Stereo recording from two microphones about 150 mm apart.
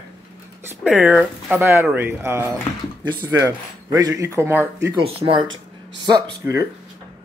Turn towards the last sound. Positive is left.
turn(degrees=-25)  # may be behind; listen again after turning